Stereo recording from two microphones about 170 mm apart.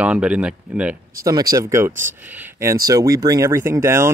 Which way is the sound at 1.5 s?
15° right (ahead or behind).